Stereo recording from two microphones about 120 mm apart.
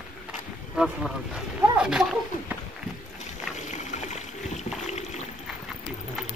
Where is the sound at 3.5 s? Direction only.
80° left.